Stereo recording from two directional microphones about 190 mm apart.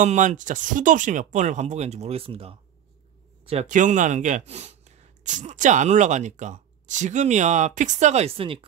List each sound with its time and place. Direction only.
0.0 s speech: 40° right (ahead or behind)